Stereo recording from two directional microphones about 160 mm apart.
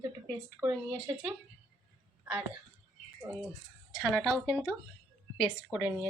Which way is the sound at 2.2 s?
10° right (ahead or behind).